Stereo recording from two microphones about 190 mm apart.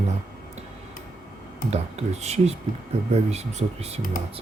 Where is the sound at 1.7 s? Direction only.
35° right (ahead or behind).